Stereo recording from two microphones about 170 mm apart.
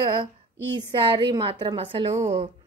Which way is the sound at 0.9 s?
30° right (ahead or behind).